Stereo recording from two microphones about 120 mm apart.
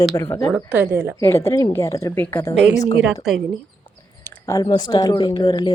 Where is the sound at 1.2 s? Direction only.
20° left (ahead or behind).